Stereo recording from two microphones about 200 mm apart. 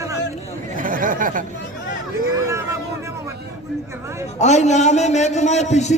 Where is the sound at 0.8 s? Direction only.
40° right (ahead or behind).